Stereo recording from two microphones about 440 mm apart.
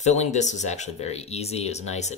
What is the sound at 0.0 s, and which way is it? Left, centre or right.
Speech, centre.